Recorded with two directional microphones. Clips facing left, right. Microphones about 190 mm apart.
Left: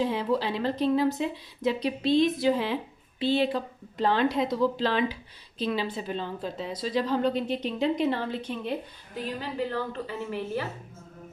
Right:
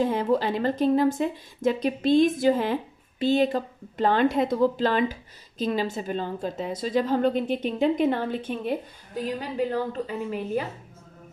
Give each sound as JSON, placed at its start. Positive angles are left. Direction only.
{"t": 0.0, "sound": "speech", "side_deg": -50}
{"t": 9.4, "sound": "a woman's voice", "side_deg": -15}